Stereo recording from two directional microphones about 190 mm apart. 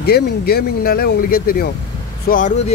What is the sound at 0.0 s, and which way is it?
A man's voice, 55° left (ahead or behind).